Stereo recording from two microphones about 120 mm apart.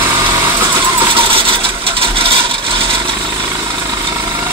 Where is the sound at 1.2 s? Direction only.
50° right (ahead or behind).